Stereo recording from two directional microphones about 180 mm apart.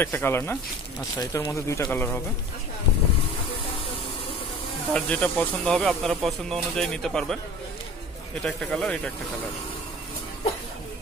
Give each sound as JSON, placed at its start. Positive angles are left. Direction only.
{"t": 0.0, "sound": "speech", "side_deg": 10}
{"t": 4.9, "sound": "speech", "side_deg": 10}
{"t": 8.5, "sound": "speech", "side_deg": 0}